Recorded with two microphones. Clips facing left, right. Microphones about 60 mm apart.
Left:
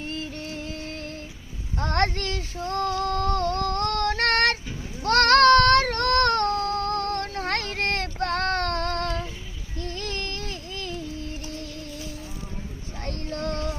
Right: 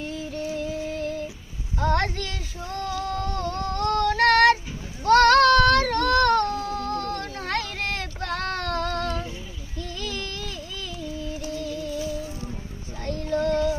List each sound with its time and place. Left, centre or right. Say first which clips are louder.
0.0 s music: right 3 dB; left
1.8 s child singing: right 1 dB; left
3.0 s female singing: left 4 dB; left
5.0 s child singing: right 1 dB; left
9.7 s music: left 1 dB; left
13.3 s music: right 8 dB; right